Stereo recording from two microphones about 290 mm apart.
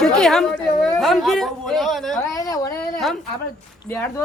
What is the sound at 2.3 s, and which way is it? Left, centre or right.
Speech, centre.